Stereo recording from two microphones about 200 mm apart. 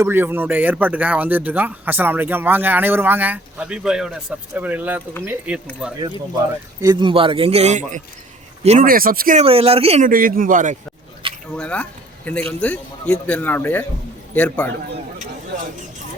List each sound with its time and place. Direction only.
0.0 s speech: 10° right (ahead or behind)
6.8 s a man's voice: 25° right (ahead or behind); by 9.4 s 45° right (ahead or behind)
9.4 s a man's voice: 30° right (ahead or behind)
10.1 s speech: 45° right (ahead or behind)
11.5 s a man's voice: 5° left (ahead or behind)